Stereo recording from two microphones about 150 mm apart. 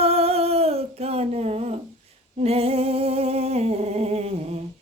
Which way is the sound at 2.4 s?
40° right (ahead or behind).